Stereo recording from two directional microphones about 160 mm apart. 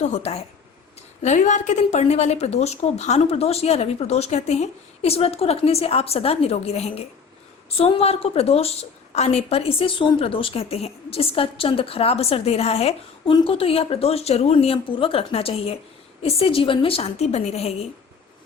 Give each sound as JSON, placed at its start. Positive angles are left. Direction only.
{"t": 0.0, "sound": "a woman's voice", "side_deg": 45}